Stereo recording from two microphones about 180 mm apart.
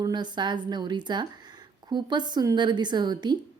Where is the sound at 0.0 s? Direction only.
25° right (ahead or behind).